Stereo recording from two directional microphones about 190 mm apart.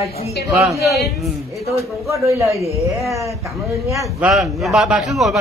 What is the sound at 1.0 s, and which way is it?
Speech, centre (ahead or behind).